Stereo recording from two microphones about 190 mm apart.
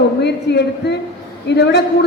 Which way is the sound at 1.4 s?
65° left (ahead or behind).